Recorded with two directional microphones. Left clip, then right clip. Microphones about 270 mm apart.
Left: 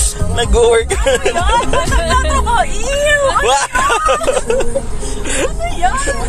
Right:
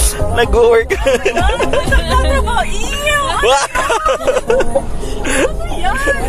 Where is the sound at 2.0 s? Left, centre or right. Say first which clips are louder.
Left 1 dB; centre.